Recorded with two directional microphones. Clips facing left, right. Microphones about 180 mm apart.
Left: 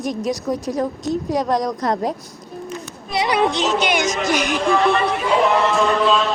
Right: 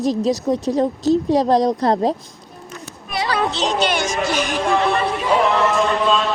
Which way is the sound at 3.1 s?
20° left (ahead or behind).